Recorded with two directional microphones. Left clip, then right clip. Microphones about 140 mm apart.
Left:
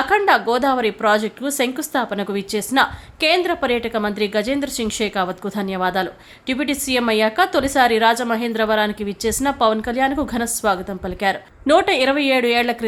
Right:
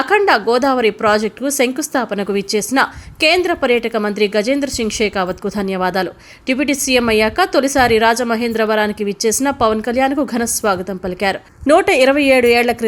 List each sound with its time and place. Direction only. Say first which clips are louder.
0.0 s a woman's voice: right 3 dB; 15° right (ahead or behind)